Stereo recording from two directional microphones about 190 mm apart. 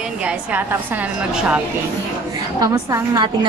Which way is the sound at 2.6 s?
20° right (ahead or behind).